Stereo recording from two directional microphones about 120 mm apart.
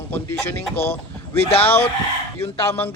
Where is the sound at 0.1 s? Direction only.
20° left (ahead or behind).